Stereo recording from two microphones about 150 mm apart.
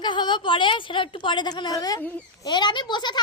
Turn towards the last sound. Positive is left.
turn(degrees=30)  # may be behind; listen again after turning